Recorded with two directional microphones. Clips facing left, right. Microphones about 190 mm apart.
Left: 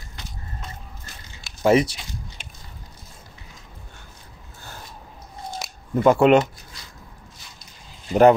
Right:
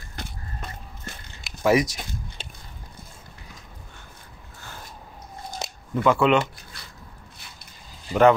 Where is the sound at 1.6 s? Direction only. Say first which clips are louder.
Left 3 dB; 30° left (ahead or behind).